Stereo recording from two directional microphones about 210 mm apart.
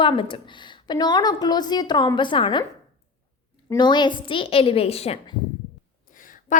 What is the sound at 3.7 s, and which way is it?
A woman's voice, 20° left (ahead or behind).